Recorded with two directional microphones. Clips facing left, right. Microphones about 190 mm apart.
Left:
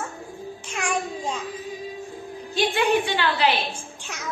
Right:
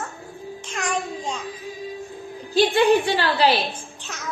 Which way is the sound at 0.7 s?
10° left (ahead or behind).